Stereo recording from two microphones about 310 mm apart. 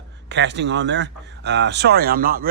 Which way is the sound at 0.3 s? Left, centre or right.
Right.